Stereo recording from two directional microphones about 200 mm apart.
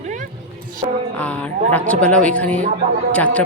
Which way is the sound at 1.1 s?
5° left (ahead or behind).